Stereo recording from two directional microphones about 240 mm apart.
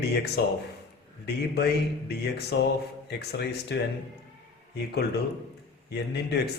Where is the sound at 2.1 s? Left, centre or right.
Left.